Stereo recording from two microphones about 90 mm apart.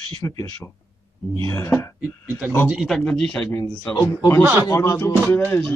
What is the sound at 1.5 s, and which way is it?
Speech, 30° left (ahead or behind).